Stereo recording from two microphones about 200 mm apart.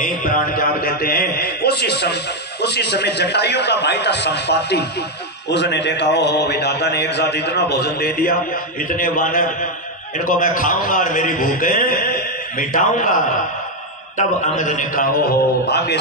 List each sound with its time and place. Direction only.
0.2 s a man's voice: 45° left (ahead or behind)
14.1 s a man's voice: 40° left (ahead or behind)